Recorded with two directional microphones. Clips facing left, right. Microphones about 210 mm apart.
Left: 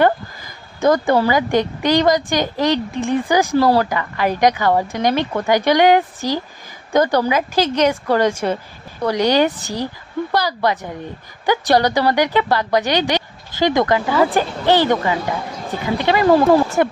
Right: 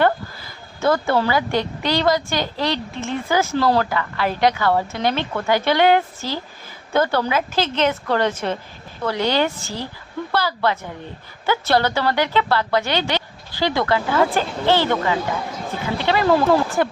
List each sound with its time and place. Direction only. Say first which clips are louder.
0.0 s a sound: left 3 dB; 15° left (ahead or behind)
1.5 s a woman's voice: left 5 dB; 15° left (ahead or behind)
16.0 s a woman's voice: left 4 dB; 15° left (ahead or behind)